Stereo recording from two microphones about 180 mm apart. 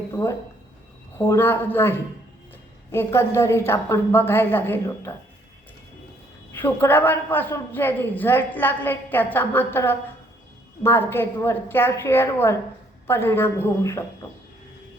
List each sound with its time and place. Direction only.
0.1 s a woman's voice: 15° left (ahead or behind)
6.5 s a woman's voice: 10° left (ahead or behind)